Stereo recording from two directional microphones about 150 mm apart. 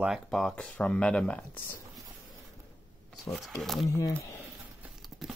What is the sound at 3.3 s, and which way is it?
Speech, centre (ahead or behind).